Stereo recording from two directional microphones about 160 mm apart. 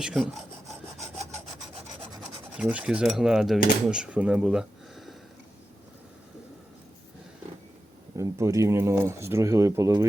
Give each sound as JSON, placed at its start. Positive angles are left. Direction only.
{"t": 0.0, "sound": "speech", "side_deg": -5}
{"t": 2.6, "sound": "speech", "side_deg": -5}
{"t": 8.1, "sound": "speech", "side_deg": -20}